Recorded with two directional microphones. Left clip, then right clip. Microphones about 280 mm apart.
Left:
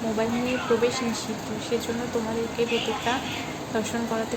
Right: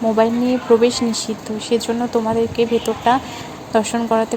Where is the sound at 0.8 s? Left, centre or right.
Right.